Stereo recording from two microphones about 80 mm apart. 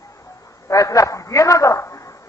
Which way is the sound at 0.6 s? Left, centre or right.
Left.